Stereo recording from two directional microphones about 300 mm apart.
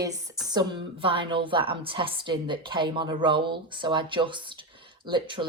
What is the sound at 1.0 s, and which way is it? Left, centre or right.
Speech, centre.